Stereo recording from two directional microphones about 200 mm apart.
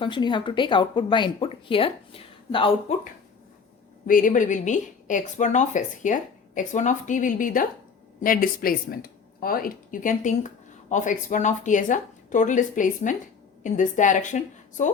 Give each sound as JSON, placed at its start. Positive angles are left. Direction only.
{"t": 0.0, "sound": "a woman's voice", "side_deg": 25}